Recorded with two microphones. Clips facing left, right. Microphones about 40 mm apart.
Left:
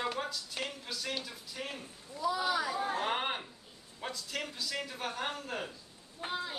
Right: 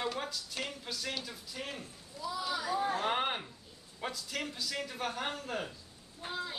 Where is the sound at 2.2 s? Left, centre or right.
Left.